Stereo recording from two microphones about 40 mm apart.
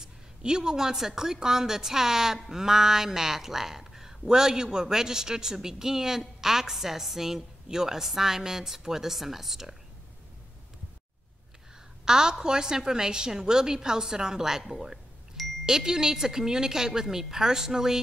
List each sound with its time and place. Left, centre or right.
0.0 s speech: centre
12.0 s speech: centre